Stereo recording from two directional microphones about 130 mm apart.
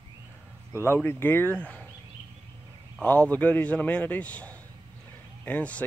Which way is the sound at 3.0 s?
10° left (ahead or behind).